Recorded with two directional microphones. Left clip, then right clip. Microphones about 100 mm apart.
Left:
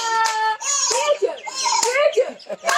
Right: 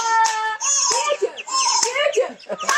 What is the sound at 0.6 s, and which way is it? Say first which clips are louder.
Music: right 1 dB; 25° left (ahead or behind).